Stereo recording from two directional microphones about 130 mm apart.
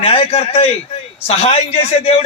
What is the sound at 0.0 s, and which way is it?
A man's voice, 50° left (ahead or behind).